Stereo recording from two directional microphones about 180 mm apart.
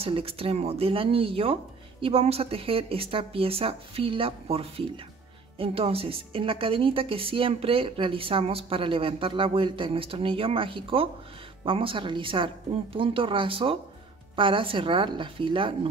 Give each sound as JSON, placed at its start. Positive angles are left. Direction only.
{"t": 0.0, "sound": "a woman's voice", "side_deg": -30}